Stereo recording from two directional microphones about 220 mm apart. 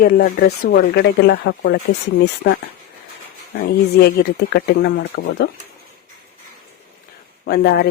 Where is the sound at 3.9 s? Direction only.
45° left (ahead or behind).